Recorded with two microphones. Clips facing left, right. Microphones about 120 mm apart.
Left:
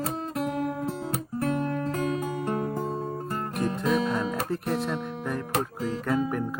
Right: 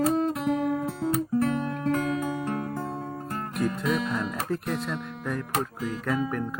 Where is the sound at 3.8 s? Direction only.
Centre (ahead or behind).